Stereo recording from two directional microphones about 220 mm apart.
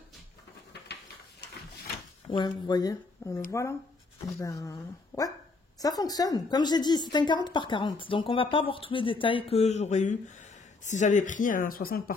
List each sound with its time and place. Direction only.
2.2 s a woman's voice: 20° left (ahead or behind); by 12.0 s 40° left (ahead or behind)